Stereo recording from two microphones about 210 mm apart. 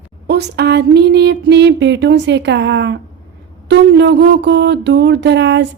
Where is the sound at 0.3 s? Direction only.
50° right (ahead or behind).